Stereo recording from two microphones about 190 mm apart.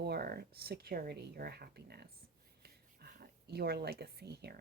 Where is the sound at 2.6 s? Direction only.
55° right (ahead or behind).